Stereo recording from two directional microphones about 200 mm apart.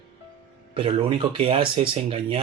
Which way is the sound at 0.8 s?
25° right (ahead or behind).